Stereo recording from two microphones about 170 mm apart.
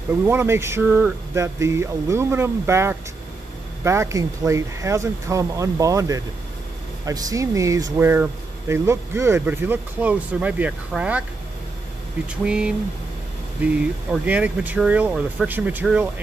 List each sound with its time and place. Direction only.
0.3 s speech: 15° right (ahead or behind)
12.4 s speech: 5° right (ahead or behind)
14.2 s speech: 10° right (ahead or behind)